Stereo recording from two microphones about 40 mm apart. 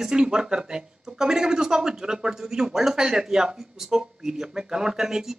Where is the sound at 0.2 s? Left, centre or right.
Right.